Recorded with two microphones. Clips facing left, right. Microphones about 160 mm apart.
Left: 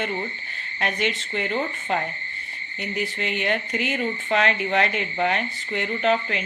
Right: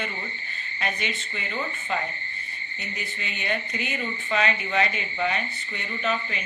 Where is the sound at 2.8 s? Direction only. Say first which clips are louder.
Left 9 dB; 75° left (ahead or behind).